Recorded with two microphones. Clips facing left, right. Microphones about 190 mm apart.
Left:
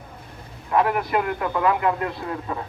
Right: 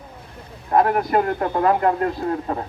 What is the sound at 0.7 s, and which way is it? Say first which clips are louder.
Speech: right 3 dB; 40° right (ahead or behind).